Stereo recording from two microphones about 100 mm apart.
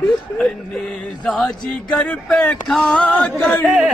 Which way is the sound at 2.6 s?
Centre (ahead or behind).